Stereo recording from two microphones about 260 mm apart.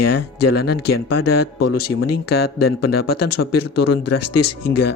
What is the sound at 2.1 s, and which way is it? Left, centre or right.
Speech, left.